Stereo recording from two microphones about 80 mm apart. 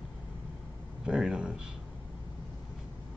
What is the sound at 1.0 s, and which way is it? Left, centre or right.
Speech, centre.